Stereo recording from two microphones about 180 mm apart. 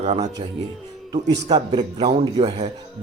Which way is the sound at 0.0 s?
35° right (ahead or behind).